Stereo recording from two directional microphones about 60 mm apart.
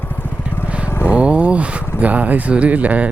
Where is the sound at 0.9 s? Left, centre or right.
Left.